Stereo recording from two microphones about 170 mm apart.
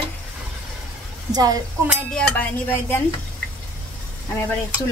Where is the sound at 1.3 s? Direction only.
20° right (ahead or behind).